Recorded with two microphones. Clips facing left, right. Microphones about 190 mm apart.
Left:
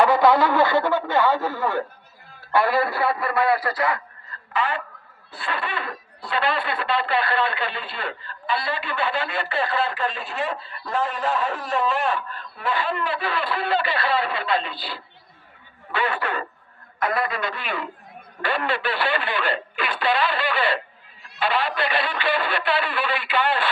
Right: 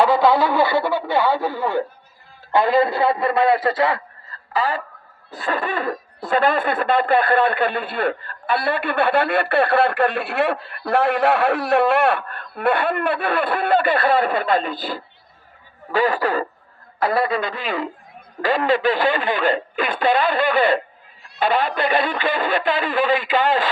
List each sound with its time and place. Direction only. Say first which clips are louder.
0.0 s a man's voice: right 1 dB; 10° right (ahead or behind); by 17.4 s 30° right (ahead or behind)
18.6 s speech: right 10 dB; 45° right (ahead or behind)